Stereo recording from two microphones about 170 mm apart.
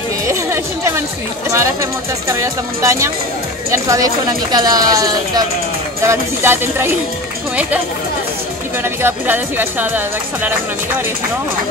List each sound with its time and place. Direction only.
0.3 s chatter: 15° right (ahead or behind)
1.5 s speech: 15° right (ahead or behind)
8.8 s speech: 15° right (ahead or behind)